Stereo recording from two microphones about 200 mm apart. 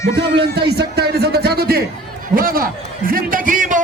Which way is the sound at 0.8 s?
55° right (ahead or behind).